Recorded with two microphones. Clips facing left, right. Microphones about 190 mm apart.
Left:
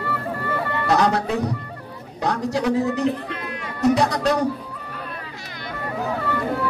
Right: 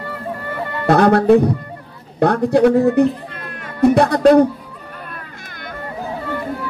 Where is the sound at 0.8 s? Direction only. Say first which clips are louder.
Right 9 dB; 55° right (ahead or behind).